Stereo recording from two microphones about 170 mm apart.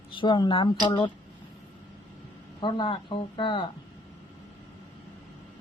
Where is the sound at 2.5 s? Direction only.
30° left (ahead or behind).